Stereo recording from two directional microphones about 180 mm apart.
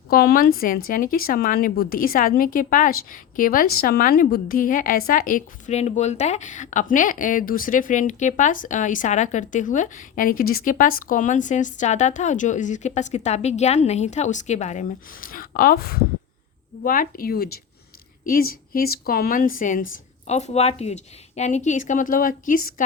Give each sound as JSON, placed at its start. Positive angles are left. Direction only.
{"t": 0.1, "sound": "a woman's voice", "side_deg": 55}
{"t": 20.2, "sound": "a woman's voice", "side_deg": 40}